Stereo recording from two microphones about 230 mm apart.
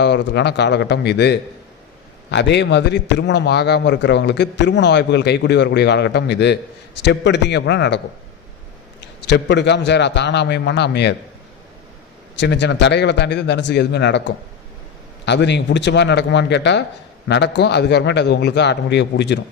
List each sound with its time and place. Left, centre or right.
0.0 s a man's voice: left
12.4 s a man's voice: left